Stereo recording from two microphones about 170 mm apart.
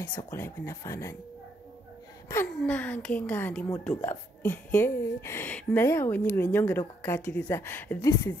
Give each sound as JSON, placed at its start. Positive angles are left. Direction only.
{"t": 0.2, "sound": "a woman's voice", "side_deg": 15}
{"t": 2.2, "sound": "a woman's voice", "side_deg": 10}